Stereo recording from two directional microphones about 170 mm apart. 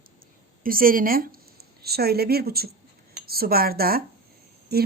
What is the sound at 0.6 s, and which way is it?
A woman's voice, 55° right (ahead or behind).